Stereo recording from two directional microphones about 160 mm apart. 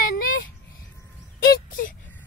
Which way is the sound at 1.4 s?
70° left (ahead or behind).